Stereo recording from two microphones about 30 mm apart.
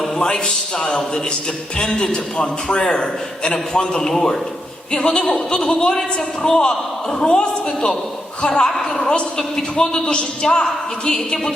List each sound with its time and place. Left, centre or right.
0.2 s a man's voice: left
8.6 s a woman's voice: centre
9.0 s a man's voice: left